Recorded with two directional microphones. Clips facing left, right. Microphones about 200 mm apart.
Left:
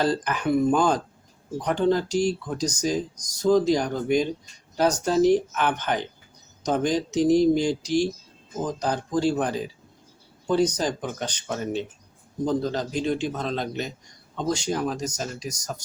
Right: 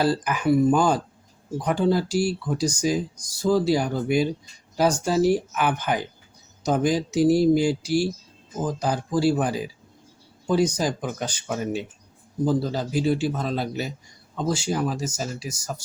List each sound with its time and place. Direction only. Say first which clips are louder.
0.0 s speech: right 2 dB; 10° right (ahead or behind)